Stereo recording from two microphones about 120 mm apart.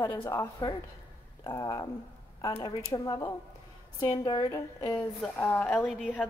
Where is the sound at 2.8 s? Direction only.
30° left (ahead or behind).